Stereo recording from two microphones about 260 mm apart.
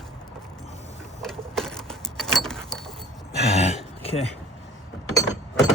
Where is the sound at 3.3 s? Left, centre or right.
Left.